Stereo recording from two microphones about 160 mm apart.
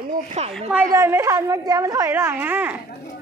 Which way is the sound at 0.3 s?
40° right (ahead or behind).